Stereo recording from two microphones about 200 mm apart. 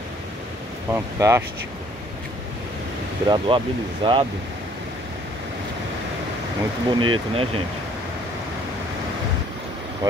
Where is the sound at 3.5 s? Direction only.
25° right (ahead or behind).